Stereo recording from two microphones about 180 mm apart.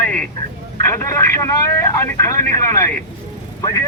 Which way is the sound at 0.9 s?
15° left (ahead or behind).